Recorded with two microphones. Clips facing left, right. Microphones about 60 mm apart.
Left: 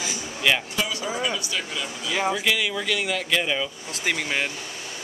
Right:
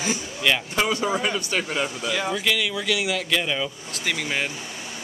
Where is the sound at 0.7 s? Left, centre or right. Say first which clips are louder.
Right 5 dB; right.